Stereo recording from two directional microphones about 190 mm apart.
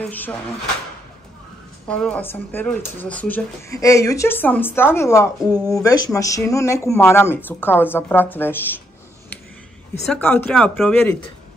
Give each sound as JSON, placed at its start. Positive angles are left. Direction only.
{"t": 0.0, "sound": "speech", "side_deg": 10}
{"t": 1.9, "sound": "speech", "side_deg": 5}
{"t": 10.0, "sound": "speech", "side_deg": 5}